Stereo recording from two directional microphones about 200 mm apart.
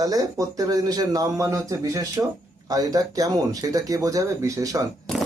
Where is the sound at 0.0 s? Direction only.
15° right (ahead or behind).